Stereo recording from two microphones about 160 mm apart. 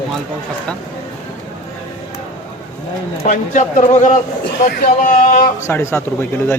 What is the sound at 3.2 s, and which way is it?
Speech, 55° left (ahead or behind).